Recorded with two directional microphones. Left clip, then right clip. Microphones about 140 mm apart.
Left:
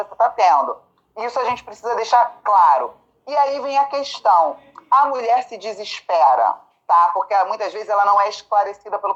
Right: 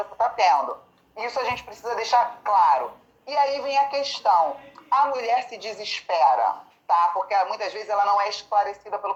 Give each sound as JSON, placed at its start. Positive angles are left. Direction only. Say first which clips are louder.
{"t": 0.0, "sound": "a woman's voice", "louder": "left 5 dB", "side_deg": 40}